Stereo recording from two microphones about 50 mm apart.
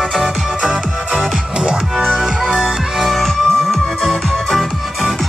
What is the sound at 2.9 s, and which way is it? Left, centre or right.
Music, centre.